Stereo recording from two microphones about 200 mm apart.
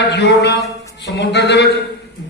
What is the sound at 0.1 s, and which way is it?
A man's voice, 60° left (ahead or behind).